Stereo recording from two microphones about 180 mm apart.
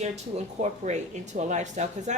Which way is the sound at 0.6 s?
40° right (ahead or behind).